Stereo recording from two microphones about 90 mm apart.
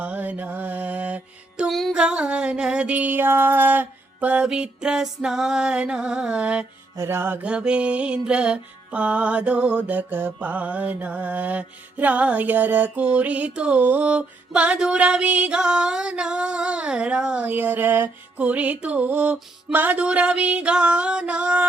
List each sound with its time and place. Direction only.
0.0 s mantra: 15° right (ahead or behind)
1.6 s music: centre (ahead or behind)
2.0 s mantra: 10° right (ahead or behind)
6.9 s music: 30° right (ahead or behind)
7.4 s mantra: 10° right (ahead or behind)